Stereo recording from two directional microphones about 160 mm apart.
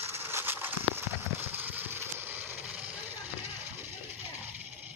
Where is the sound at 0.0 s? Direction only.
15° right (ahead or behind).